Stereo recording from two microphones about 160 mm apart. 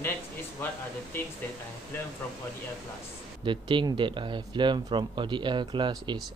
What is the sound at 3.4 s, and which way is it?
A man's voice, 30° right (ahead or behind).